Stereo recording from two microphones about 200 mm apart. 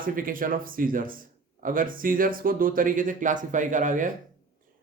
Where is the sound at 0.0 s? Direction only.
45° right (ahead or behind).